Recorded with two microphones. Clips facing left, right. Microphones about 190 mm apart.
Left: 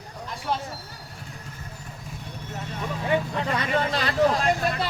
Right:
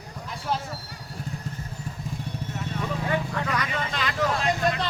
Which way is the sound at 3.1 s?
25° left (ahead or behind).